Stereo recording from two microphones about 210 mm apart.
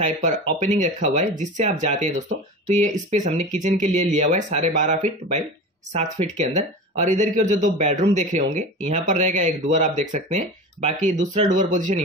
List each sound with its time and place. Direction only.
0.0 s speech: 35° right (ahead or behind)
5.9 s speech: 35° right (ahead or behind)